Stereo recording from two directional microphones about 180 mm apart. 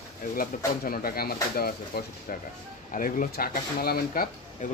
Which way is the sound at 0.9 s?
55° left (ahead or behind).